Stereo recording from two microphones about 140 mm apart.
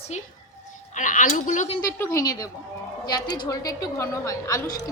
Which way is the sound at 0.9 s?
65° left (ahead or behind).